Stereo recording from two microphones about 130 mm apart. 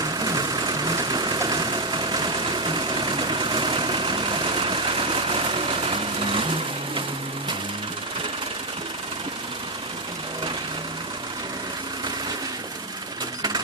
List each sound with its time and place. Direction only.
0.0 s vehicle: 30° right (ahead or behind)